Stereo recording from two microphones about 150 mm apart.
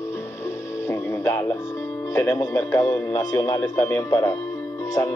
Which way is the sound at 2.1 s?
20° left (ahead or behind).